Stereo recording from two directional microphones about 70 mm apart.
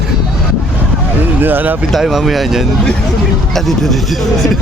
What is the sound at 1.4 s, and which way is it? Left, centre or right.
Speech, right.